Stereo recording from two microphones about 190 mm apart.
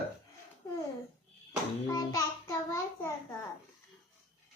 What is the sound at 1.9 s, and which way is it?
Child singing, 20° left (ahead or behind).